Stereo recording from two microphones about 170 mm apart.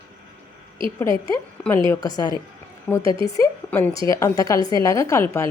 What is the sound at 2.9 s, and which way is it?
A woman's voice, 10° left (ahead or behind).